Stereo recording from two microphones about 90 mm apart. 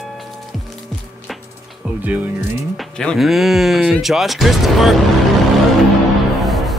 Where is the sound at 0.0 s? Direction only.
Centre (ahead or behind).